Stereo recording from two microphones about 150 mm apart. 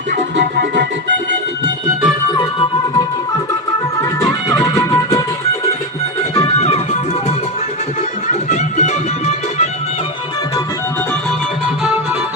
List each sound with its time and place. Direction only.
2.3 s music: 30° left (ahead or behind)
4.2 s music: 25° left (ahead or behind)
6.6 s music: 45° left (ahead or behind)